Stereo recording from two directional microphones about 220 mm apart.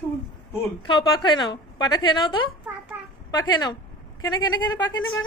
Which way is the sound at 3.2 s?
20° left (ahead or behind).